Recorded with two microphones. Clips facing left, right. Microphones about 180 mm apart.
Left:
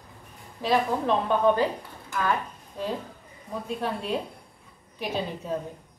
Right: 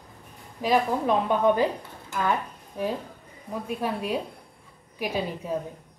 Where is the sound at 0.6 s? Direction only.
10° right (ahead or behind).